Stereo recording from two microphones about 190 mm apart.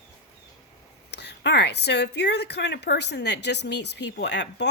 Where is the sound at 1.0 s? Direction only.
60° left (ahead or behind).